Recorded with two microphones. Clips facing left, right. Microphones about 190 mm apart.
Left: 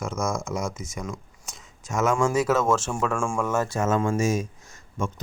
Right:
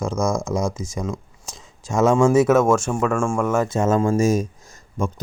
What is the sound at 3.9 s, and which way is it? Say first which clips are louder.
A man's voice: right 6 dB; 35° right (ahead or behind).